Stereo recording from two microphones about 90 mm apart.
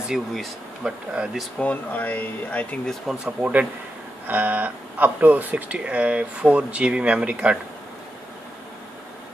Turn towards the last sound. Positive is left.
turn(degrees=-10)  # may be behind; listen again after turning